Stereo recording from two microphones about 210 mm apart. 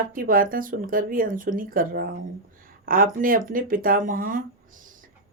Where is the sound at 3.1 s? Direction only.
40° right (ahead or behind).